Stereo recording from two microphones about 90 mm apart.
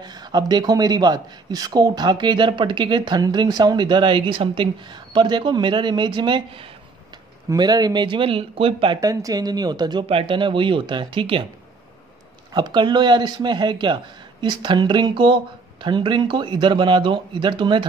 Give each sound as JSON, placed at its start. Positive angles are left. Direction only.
{"t": 0.0, "sound": "speech", "side_deg": -50}
{"t": 7.5, "sound": "speech", "side_deg": -50}
{"t": 9.0, "sound": "speech", "side_deg": -40}
{"t": 10.0, "sound": "speech", "side_deg": -75}
{"t": 12.5, "sound": "speech", "side_deg": -55}